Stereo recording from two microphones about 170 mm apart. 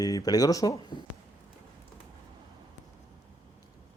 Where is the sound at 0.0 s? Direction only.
20° left (ahead or behind).